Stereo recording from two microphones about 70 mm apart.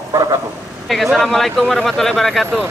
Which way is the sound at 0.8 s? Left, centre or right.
Centre.